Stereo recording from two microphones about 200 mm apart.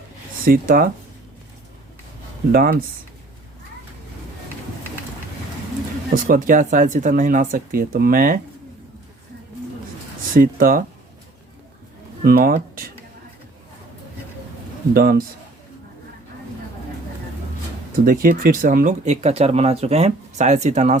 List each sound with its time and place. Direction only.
0.4 s speech: 45° right (ahead or behind)
2.5 s speech: 45° right (ahead or behind)
6.2 s speech: 45° right (ahead or behind)
10.3 s speech: 45° right (ahead or behind)
12.2 s speech: 45° right (ahead or behind)
14.9 s speech: 45° right (ahead or behind)
18.0 s speech: 45° right (ahead or behind)